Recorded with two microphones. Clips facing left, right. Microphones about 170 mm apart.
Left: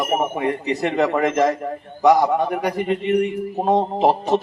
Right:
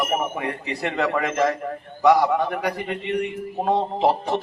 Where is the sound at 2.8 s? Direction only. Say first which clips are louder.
Left 6 dB; 40° left (ahead or behind).